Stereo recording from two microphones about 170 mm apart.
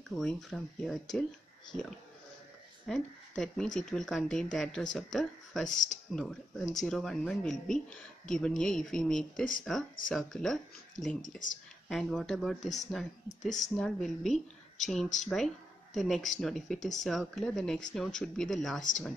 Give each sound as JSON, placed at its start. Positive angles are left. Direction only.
{"t": 0.1, "sound": "speech", "side_deg": 5}
{"t": 5.7, "sound": "speech", "side_deg": 45}
{"t": 6.1, "sound": "speech", "side_deg": 0}
{"t": 18.8, "sound": "speech", "side_deg": 50}